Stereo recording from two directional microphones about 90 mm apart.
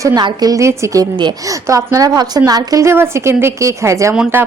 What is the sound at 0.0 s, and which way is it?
Speech, 45° right (ahead or behind).